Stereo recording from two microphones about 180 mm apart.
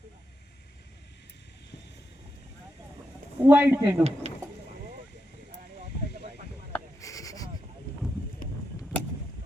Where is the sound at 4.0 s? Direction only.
35° right (ahead or behind).